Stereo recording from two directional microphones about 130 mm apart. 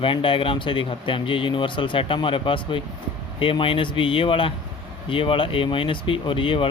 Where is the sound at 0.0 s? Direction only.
40° left (ahead or behind).